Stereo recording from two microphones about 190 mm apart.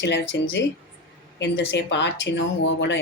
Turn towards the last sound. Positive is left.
turn(degrees=70)  # may be behind; listen again after turning